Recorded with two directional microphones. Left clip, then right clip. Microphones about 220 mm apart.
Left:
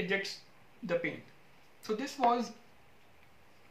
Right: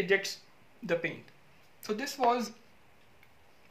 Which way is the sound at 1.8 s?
45° right (ahead or behind).